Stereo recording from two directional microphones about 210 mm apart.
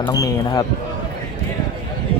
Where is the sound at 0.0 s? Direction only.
15° left (ahead or behind).